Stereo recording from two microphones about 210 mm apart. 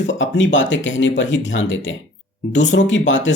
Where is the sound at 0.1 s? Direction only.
60° left (ahead or behind).